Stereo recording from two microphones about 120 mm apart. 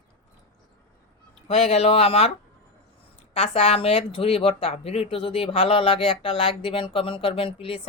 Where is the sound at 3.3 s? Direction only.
55° left (ahead or behind).